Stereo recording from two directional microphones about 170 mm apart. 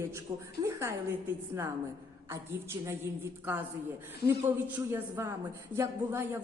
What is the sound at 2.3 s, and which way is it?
A woman's voice, 15° right (ahead or behind).